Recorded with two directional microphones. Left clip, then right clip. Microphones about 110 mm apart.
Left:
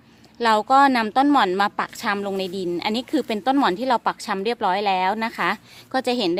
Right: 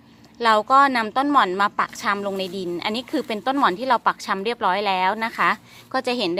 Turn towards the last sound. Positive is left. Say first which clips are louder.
# left 1 dB
turn(degrees=30)  # may be behind; listen again after turning